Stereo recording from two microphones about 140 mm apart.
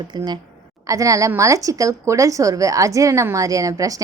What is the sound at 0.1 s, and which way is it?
A woman's voice, 30° right (ahead or behind).